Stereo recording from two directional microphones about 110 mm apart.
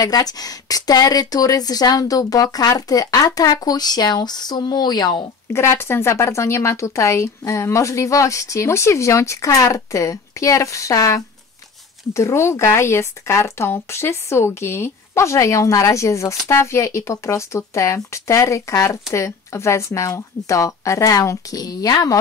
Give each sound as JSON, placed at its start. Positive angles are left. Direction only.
{"t": 0.0, "sound": "speech", "side_deg": 35}
{"t": 5.5, "sound": "speech", "side_deg": 25}